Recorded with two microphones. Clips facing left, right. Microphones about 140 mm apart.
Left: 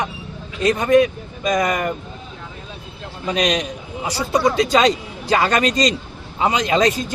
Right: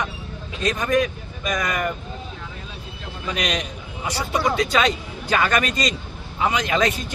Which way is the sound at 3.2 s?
35° left (ahead or behind).